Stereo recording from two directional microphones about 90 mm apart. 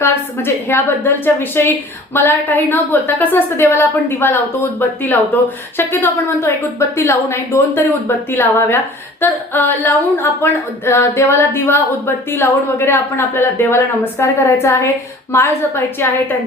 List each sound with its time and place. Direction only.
0.0 s speech: 25° left (ahead or behind)